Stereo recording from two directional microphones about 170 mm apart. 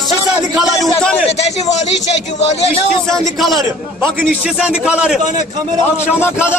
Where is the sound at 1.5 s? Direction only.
40° left (ahead or behind).